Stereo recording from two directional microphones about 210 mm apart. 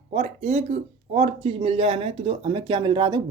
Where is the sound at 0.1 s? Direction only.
30° right (ahead or behind).